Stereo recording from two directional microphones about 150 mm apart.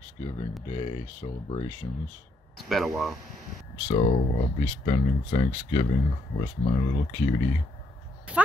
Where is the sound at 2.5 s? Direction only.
Centre (ahead or behind).